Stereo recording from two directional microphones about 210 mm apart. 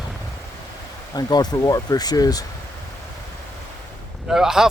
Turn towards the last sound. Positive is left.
turn(degrees=0)  # may be behind; listen again after turning